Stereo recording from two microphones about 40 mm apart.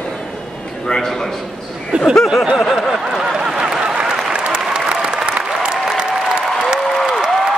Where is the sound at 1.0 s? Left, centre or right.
Centre.